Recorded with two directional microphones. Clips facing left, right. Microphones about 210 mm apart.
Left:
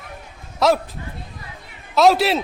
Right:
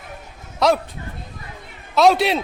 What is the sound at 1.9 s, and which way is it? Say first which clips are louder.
Speech: even; centre (ahead or behind).